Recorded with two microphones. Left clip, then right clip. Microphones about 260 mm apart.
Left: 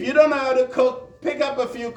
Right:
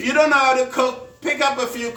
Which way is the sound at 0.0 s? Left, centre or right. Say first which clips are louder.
Right 2 dB; centre.